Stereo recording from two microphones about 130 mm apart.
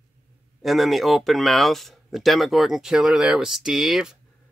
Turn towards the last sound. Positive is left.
turn(degrees=-5)  # may be behind; listen again after turning